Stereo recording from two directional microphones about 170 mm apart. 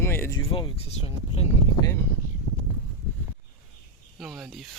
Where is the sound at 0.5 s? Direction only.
35° left (ahead or behind).